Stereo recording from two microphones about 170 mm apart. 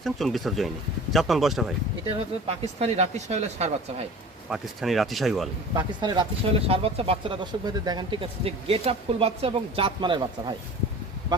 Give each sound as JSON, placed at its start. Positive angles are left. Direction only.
{"t": 0.0, "sound": "speech", "side_deg": 0}
{"t": 2.0, "sound": "speech", "side_deg": -35}
{"t": 4.4, "sound": "speech", "side_deg": -5}
{"t": 5.7, "sound": "speech", "side_deg": -25}